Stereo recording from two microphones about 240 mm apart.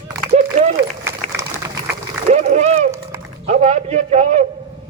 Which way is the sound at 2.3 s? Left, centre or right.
Right.